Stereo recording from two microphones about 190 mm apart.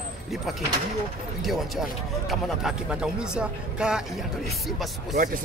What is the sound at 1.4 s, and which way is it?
Speech, centre (ahead or behind).